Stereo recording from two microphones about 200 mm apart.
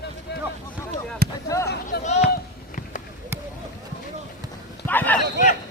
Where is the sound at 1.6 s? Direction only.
55° left (ahead or behind).